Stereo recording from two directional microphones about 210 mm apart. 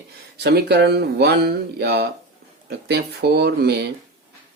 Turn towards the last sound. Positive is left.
turn(degrees=-50)  # may be behind; listen again after turning